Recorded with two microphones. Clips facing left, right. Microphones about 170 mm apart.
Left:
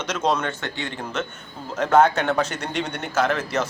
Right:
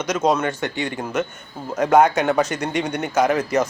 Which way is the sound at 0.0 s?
10° right (ahead or behind).